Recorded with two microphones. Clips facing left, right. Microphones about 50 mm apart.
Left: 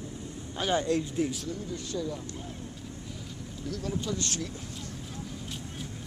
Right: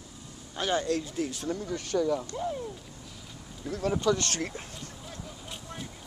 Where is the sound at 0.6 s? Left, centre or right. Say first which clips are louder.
Left 1 dB; centre.